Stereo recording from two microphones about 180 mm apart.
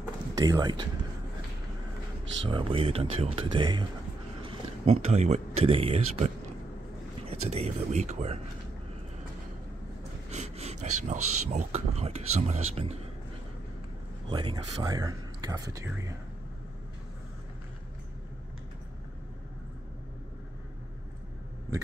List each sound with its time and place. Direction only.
0.3 s speech: 20° right (ahead or behind)
2.4 s speech: 30° right (ahead or behind)
10.3 s speech: 40° right (ahead or behind)
14.3 s speech: 25° right (ahead or behind)
21.7 s speech: 20° right (ahead or behind)